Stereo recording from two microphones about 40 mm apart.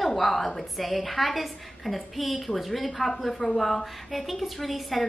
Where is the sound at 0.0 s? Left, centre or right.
Centre.